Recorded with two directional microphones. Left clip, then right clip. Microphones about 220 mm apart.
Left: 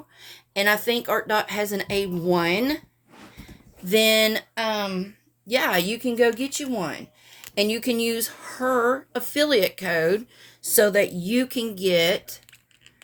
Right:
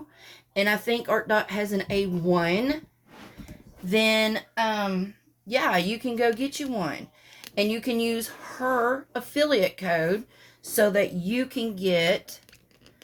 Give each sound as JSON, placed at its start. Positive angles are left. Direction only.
{"t": 0.2, "sound": "speech", "side_deg": 55}
{"t": 3.8, "sound": "speech", "side_deg": 50}